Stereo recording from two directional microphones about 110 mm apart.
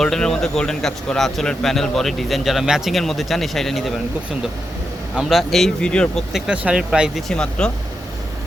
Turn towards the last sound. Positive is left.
turn(degrees=5)  # may be behind; listen again after turning